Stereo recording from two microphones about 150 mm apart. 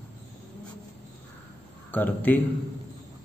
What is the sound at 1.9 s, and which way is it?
Speech, 10° left (ahead or behind).